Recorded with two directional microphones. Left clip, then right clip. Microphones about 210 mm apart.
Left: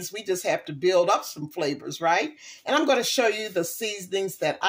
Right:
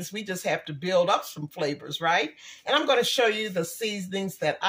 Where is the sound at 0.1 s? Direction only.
35° left (ahead or behind).